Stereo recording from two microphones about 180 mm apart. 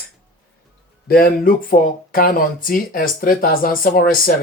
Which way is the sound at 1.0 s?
55° left (ahead or behind).